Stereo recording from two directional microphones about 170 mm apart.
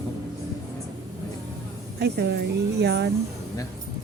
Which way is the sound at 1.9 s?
70° right (ahead or behind).